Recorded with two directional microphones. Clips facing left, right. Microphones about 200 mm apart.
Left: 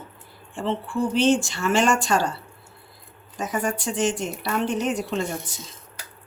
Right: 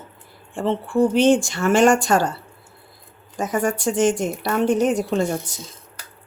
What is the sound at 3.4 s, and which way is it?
Speech, 45° right (ahead or behind).